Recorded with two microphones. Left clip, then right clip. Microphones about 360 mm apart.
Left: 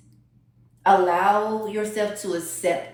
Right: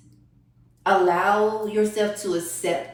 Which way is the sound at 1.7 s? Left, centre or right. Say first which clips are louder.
Right 4 dB; left.